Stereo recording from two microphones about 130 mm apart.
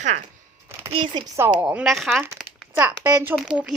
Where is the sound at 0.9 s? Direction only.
40° right (ahead or behind).